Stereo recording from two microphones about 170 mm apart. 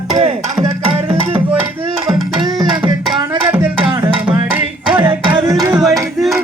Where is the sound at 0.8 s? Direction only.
30° right (ahead or behind).